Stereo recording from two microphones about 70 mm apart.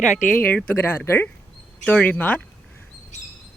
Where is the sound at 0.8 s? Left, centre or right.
Left.